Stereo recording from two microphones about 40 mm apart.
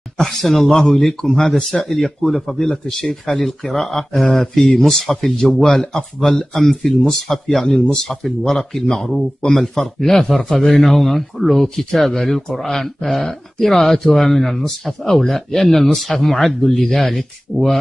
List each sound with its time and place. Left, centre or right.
0.3 s speech: centre
7.7 s speech: left
8.0 s speech: centre